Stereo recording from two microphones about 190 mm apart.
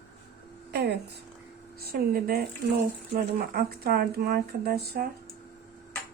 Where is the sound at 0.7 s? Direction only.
60° right (ahead or behind).